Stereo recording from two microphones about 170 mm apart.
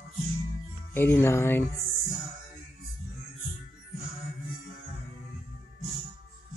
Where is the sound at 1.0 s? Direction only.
15° left (ahead or behind).